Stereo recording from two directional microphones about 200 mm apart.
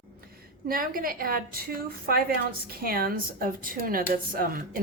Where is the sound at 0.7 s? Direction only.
45° right (ahead or behind).